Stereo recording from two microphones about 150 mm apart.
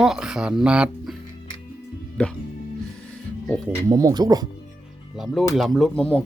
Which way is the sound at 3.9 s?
25° right (ahead or behind).